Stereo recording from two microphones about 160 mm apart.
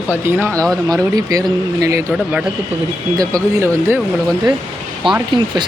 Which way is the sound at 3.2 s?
20° right (ahead or behind).